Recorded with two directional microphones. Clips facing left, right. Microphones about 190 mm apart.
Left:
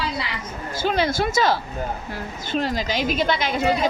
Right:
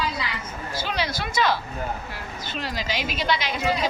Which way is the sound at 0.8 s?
50° left (ahead or behind).